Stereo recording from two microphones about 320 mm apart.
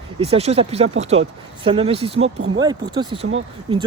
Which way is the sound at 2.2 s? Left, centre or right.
Right.